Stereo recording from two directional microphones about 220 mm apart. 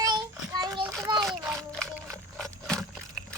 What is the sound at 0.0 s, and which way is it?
Child singing, 20° right (ahead or behind).